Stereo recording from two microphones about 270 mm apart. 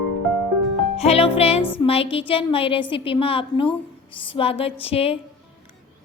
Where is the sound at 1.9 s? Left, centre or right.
Left.